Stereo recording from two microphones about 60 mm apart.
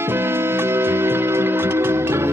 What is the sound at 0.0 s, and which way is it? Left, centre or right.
Music, right.